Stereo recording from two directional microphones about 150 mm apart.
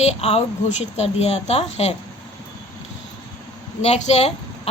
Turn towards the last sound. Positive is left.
turn(degrees=45)  # may be behind; listen again after turning